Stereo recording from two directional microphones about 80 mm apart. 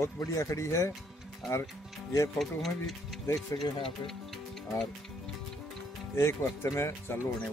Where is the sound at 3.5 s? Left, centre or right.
Left.